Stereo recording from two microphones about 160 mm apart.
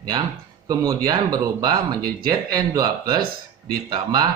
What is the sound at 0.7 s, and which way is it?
Speech, 25° right (ahead or behind).